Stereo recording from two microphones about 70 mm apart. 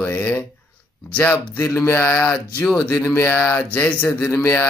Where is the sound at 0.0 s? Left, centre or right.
Left.